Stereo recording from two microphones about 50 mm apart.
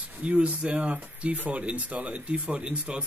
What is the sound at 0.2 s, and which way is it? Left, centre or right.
Speech, right.